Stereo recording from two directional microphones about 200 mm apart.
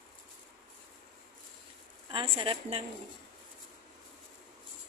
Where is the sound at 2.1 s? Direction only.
25° right (ahead or behind).